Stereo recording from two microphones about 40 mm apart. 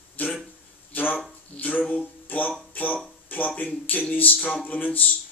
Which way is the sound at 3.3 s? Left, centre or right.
Left.